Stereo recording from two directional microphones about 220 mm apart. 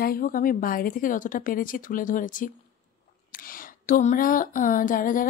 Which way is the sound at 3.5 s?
35° left (ahead or behind).